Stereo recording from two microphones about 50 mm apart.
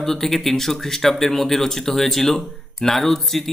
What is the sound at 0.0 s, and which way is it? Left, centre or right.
Speech, centre.